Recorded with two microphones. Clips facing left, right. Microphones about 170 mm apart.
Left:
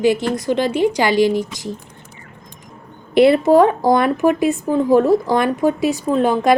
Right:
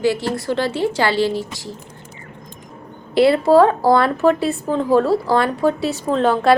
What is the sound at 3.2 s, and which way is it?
A woman's voice, 20° left (ahead or behind).